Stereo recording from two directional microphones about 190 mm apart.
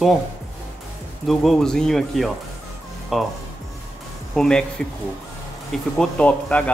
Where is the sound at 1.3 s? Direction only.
Centre (ahead or behind).